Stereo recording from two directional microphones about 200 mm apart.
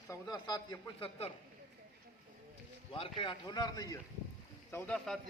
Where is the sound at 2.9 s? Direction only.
25° left (ahead or behind).